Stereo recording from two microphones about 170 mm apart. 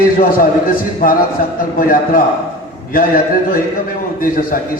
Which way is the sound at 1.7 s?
55° left (ahead or behind).